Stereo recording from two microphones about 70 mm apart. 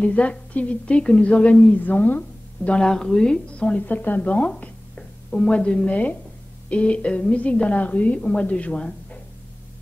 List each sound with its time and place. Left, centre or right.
0.0 s a woman's voice: centre